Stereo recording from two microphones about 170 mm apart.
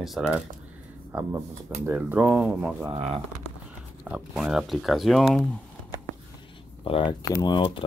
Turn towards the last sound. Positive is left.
turn(degrees=30)  # may be behind; listen again after turning